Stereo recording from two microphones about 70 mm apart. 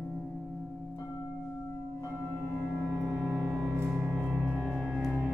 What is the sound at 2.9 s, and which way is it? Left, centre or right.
Music, centre.